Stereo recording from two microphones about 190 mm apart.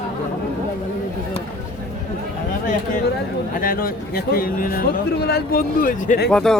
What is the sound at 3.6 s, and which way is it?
Speech, 50° left (ahead or behind).